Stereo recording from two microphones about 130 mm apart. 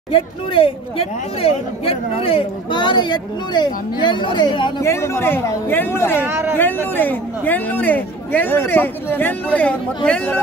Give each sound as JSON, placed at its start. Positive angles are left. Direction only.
{"t": 0.1, "sound": "speech", "side_deg": 45}
{"t": 4.8, "sound": "speech", "side_deg": 20}
{"t": 6.2, "sound": "speech", "side_deg": -20}
{"t": 6.6, "sound": "speech", "side_deg": 15}